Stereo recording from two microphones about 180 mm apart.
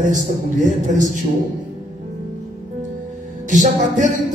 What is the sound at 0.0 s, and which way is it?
Music, 45° right (ahead or behind).